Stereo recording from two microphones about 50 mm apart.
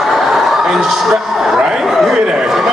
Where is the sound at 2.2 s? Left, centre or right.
Centre.